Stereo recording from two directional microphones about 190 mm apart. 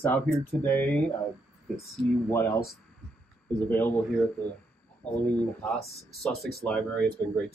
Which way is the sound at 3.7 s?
10° left (ahead or behind).